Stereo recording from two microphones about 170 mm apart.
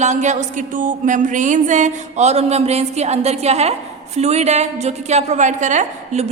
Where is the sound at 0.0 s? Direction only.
45° right (ahead or behind).